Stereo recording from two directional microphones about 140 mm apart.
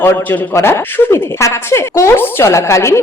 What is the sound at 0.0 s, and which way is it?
A man's voice, 15° left (ahead or behind).